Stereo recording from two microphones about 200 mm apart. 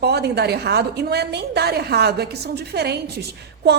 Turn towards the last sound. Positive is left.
turn(degrees=-55)  # may be behind; listen again after turning